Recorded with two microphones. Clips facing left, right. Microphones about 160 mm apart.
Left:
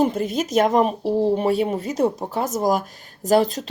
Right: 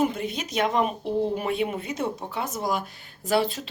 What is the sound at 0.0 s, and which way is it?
Speech, 40° left (ahead or behind).